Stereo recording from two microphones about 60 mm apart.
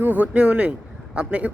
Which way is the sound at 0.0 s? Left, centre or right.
Right.